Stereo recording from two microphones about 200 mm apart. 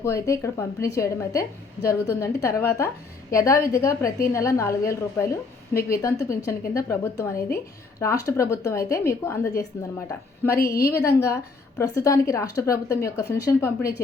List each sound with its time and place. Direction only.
0.0 s a woman's voice: 15° left (ahead or behind)